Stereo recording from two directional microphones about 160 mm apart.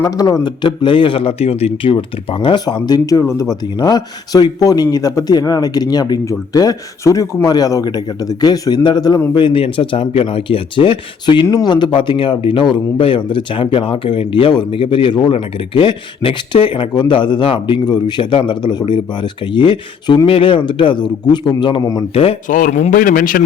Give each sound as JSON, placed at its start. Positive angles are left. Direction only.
{"t": 0.0, "sound": "a man's voice", "side_deg": 20}
{"t": 22.1, "sound": "speech", "side_deg": 35}
{"t": 22.4, "sound": "a man's voice", "side_deg": 55}